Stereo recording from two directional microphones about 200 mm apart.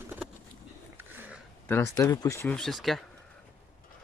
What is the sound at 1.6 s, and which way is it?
Speech, 10° left (ahead or behind).